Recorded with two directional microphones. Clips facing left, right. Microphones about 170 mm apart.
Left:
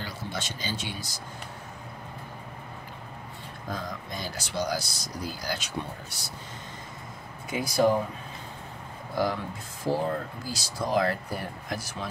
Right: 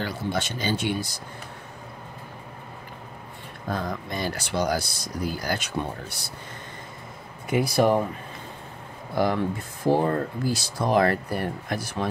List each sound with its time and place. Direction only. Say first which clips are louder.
0.0 s speech: right 7 dB; 60° right (ahead or behind)
3.7 s speech: right 6 dB; 60° right (ahead or behind)
7.4 s speech: right 3 dB; 60° right (ahead or behind)
9.9 s speech: right 6 dB; 60° right (ahead or behind)